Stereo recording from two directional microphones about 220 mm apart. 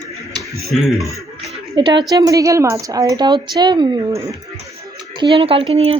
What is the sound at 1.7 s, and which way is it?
A woman's voice, 20° right (ahead or behind).